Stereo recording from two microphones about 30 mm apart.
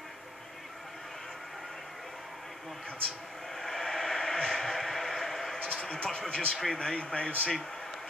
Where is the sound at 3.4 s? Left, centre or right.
Centre.